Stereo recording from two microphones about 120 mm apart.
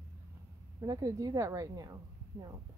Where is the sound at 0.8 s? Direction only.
30° right (ahead or behind).